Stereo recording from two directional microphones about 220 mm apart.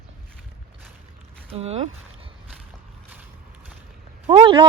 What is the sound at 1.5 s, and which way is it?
Speech, 25° right (ahead or behind).